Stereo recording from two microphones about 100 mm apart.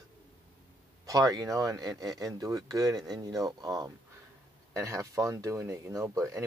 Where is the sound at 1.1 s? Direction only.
35° right (ahead or behind).